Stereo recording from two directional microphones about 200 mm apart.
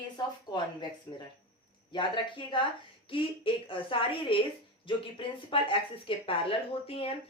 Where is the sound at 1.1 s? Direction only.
15° left (ahead or behind).